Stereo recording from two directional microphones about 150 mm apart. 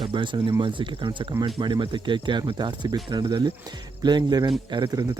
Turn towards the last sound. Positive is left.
turn(degrees=-30)  # may be behind; listen again after turning